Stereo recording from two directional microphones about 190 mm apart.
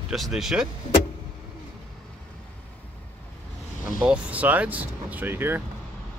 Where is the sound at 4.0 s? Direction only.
5° right (ahead or behind).